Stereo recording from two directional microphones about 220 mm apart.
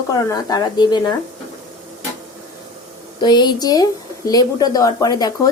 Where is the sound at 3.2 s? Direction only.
20° left (ahead or behind).